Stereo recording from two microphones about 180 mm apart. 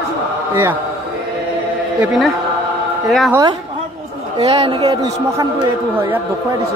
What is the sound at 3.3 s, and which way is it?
Speech, 20° right (ahead or behind).